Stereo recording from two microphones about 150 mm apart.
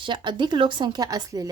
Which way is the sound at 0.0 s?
30° right (ahead or behind).